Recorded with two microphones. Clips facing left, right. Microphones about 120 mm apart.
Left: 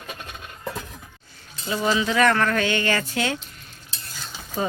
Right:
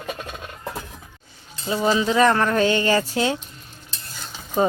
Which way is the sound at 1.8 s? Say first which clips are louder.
Right 2 dB; 30° right (ahead or behind).